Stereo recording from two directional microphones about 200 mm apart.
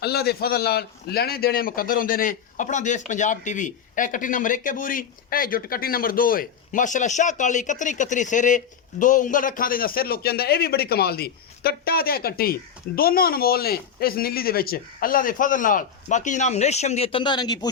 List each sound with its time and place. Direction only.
0.0 s a man's voice: 55° left (ahead or behind); by 17.7 s 20° left (ahead or behind)